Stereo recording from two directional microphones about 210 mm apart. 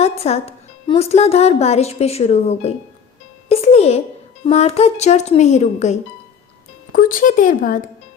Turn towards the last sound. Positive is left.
turn(degrees=40)  # may be behind; listen again after turning